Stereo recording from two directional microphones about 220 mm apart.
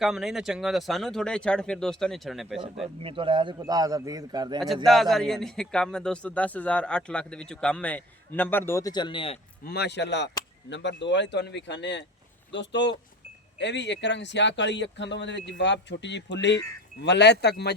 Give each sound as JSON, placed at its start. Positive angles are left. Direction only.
{"t": 0.0, "sound": "a man's voice", "side_deg": 0}
{"t": 2.8, "sound": "speech", "side_deg": -25}
{"t": 4.6, "sound": "a man's voice", "side_deg": 0}
{"t": 9.6, "sound": "speech", "side_deg": 45}